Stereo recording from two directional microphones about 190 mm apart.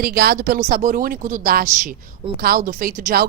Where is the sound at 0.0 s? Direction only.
55° right (ahead or behind).